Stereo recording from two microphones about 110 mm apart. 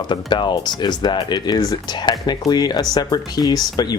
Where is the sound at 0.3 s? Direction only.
45° left (ahead or behind).